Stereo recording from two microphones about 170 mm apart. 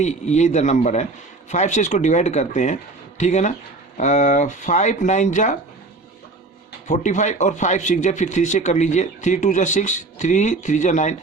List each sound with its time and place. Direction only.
0.0 s speech: 40° left (ahead or behind)
6.8 s speech: 45° left (ahead or behind)